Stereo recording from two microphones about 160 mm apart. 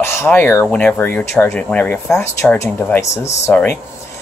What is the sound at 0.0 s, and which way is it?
Speech, 15° left (ahead or behind).